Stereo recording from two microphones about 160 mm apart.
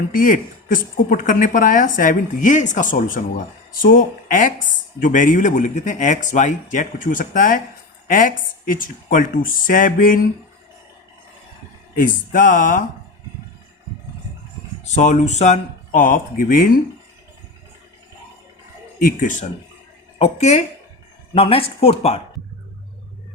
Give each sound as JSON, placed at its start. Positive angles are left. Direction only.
{"t": 0.1, "sound": "a woman's voice", "side_deg": 60}
{"t": 11.9, "sound": "a woman's voice", "side_deg": 55}
{"t": 14.9, "sound": "speech", "side_deg": 50}
{"t": 18.9, "sound": "speech", "side_deg": 55}